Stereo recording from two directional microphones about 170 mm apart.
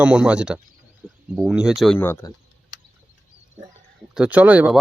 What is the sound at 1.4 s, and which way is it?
Speech, 5° right (ahead or behind).